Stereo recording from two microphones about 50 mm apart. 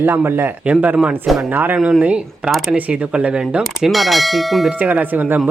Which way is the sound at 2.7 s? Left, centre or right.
Right.